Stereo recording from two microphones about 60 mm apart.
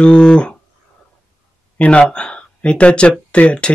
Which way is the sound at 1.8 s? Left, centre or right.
Centre.